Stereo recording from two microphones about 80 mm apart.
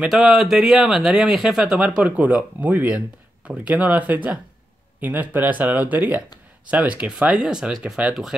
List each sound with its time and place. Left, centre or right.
0.1 s speech: centre